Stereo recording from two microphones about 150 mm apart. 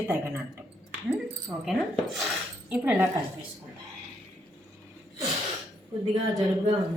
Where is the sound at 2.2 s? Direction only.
10° right (ahead or behind).